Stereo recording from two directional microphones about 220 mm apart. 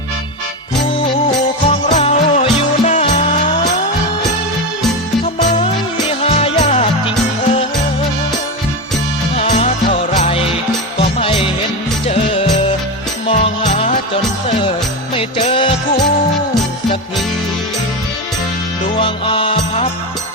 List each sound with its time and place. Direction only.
1.9 s music: 30° left (ahead or behind)
5.2 s music: 30° left (ahead or behind)
9.3 s music: 30° left (ahead or behind)
12.0 s music: 25° left (ahead or behind)
15.1 s music: 25° left (ahead or behind)
18.9 s music: 25° left (ahead or behind)